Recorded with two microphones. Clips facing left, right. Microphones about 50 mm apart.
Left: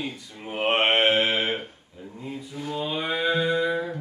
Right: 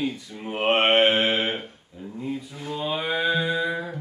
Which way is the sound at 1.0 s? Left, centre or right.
Centre.